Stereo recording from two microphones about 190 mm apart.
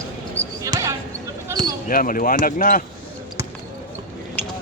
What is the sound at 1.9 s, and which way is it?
Speech, 45° left (ahead or behind).